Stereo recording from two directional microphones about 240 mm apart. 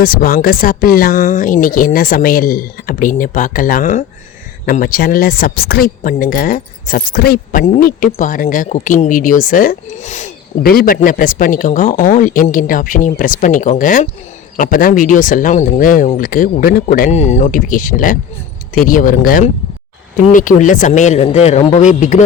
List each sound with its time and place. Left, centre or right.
0.0 s speech: left